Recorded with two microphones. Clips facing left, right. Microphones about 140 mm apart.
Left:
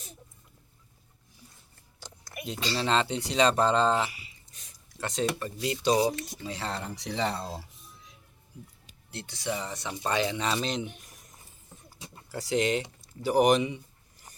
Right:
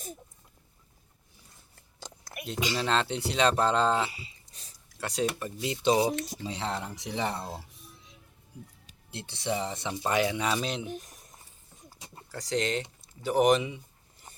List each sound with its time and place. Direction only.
2.3 s a sound: centre (ahead or behind)
2.7 s speech: centre (ahead or behind)
4.1 s a sound: 30° right (ahead or behind)
4.9 s speech: 10° right (ahead or behind)
9.0 s speech: 25° right (ahead or behind); by 10.8 s 5° right (ahead or behind)
12.3 s speech: 5° left (ahead or behind)